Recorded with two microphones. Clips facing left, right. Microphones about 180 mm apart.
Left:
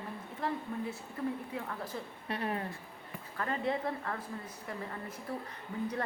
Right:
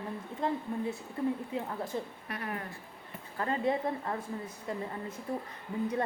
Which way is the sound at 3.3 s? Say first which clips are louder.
Right 3 dB; 25° right (ahead or behind).